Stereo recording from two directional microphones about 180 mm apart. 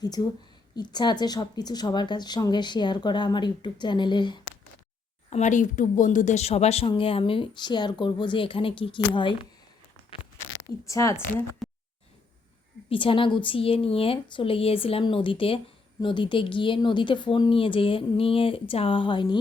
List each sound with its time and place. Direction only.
0.8 s speech: 25° left (ahead or behind)
5.3 s speech: 40° left (ahead or behind)
10.4 s speech: 15° left (ahead or behind)
12.9 s speech: 30° left (ahead or behind)